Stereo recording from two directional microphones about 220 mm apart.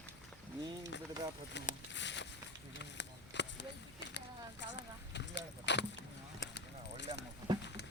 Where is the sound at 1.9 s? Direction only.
55° left (ahead or behind).